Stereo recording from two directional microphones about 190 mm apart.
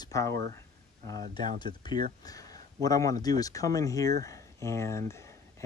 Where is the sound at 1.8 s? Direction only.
25° left (ahead or behind).